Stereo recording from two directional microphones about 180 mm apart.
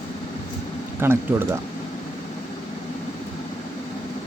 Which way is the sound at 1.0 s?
15° right (ahead or behind).